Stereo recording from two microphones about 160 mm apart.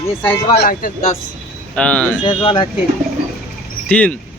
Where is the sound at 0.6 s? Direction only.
60° left (ahead or behind).